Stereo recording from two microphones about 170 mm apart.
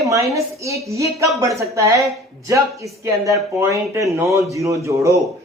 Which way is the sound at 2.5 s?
15° right (ahead or behind).